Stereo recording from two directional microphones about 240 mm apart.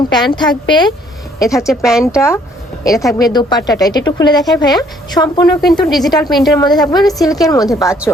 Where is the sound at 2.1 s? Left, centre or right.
Centre.